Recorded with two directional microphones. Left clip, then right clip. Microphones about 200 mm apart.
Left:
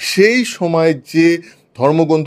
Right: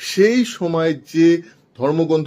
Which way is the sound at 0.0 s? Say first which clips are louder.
Left 4 dB; 25° left (ahead or behind).